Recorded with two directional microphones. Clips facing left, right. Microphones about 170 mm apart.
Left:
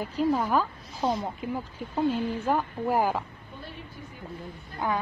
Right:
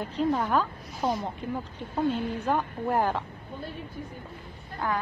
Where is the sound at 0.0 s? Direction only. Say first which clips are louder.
Left 1 dB; 5° left (ahead or behind).